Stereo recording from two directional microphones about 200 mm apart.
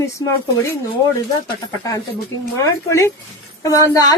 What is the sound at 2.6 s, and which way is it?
Speech, 15° left (ahead or behind).